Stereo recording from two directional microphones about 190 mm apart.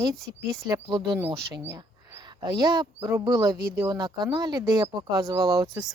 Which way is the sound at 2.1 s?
20° right (ahead or behind).